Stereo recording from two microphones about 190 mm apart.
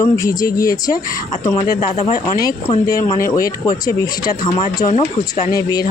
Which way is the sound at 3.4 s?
20° left (ahead or behind).